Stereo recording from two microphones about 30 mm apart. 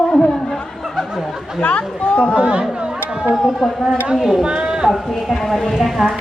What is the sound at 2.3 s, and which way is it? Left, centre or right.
Speech, right.